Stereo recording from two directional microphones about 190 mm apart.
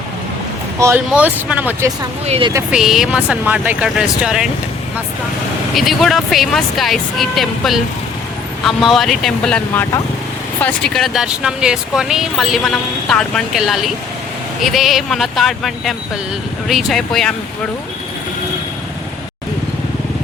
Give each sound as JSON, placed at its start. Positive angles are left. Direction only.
{"t": 0.8, "sound": "speech", "side_deg": -15}
{"t": 2.2, "sound": "speech", "side_deg": -35}
{"t": 2.7, "sound": "speech", "side_deg": 0}
{"t": 5.7, "sound": "speech", "side_deg": 0}